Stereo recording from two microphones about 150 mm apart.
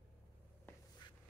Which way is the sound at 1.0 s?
30° left (ahead or behind).